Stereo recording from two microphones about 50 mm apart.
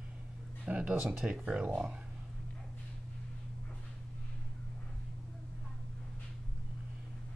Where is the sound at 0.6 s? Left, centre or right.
Right.